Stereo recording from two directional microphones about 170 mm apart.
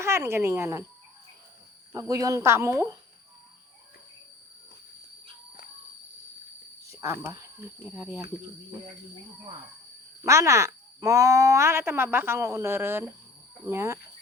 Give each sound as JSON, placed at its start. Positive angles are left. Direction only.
{"t": 0.0, "sound": "speech", "side_deg": -15}
{"t": 1.9, "sound": "speech", "side_deg": -20}
{"t": 6.9, "sound": "speech", "side_deg": -15}
{"t": 10.2, "sound": "speech", "side_deg": -15}